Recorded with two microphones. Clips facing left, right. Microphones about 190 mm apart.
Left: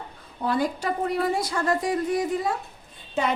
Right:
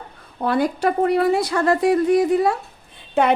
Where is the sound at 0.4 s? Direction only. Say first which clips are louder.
Right 6 dB; 65° right (ahead or behind).